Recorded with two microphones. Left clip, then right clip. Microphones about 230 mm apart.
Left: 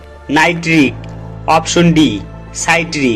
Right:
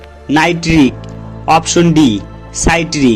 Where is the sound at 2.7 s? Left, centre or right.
Right.